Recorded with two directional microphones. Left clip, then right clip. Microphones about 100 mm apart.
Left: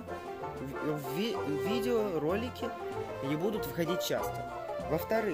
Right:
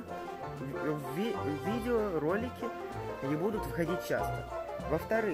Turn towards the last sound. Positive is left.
turn(degrees=15)  # may be behind; listen again after turning